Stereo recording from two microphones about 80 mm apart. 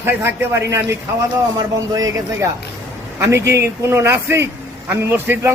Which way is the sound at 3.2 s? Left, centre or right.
Right.